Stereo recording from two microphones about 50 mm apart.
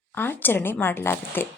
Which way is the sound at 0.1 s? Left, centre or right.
Left.